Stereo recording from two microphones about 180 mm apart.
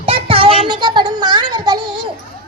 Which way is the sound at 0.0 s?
30° right (ahead or behind).